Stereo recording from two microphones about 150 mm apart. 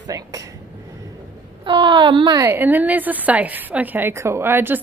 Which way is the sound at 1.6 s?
30° right (ahead or behind).